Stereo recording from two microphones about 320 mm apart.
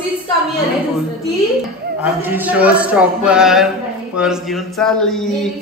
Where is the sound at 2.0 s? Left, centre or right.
Centre.